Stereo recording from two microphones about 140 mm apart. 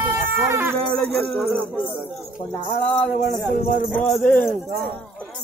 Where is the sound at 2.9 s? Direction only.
10° left (ahead or behind).